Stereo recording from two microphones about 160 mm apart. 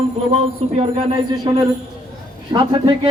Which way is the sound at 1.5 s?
25° right (ahead or behind).